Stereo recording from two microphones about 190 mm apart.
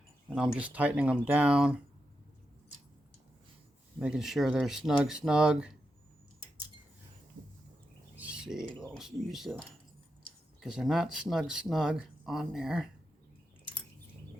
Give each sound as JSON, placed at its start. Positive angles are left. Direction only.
{"t": 0.3, "sound": "speech", "side_deg": -5}
{"t": 4.0, "sound": "speech", "side_deg": -5}
{"t": 8.1, "sound": "bird", "side_deg": -5}
{"t": 8.9, "sound": "speech", "side_deg": 0}
{"t": 10.6, "sound": "speech", "side_deg": 0}